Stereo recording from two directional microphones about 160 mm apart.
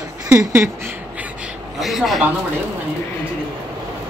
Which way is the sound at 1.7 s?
Centre (ahead or behind).